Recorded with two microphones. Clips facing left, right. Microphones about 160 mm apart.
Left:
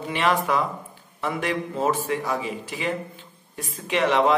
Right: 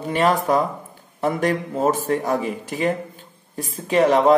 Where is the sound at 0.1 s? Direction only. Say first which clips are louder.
Right 4 dB; 40° right (ahead or behind).